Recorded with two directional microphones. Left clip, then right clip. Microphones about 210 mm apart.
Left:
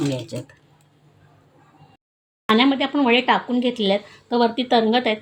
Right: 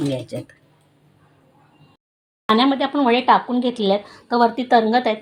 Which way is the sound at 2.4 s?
Centre (ahead or behind).